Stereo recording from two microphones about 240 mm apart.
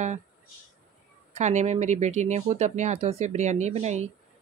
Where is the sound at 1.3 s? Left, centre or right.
Right.